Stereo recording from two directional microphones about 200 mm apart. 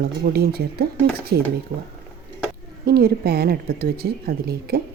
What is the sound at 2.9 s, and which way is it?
Speech, 50° right (ahead or behind).